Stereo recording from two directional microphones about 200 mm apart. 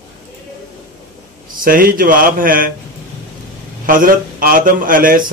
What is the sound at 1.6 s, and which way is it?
A man's voice, 45° right (ahead or behind).